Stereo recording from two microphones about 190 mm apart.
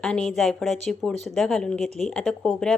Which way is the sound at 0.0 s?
5° left (ahead or behind).